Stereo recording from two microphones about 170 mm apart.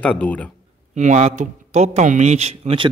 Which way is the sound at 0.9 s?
45° right (ahead or behind).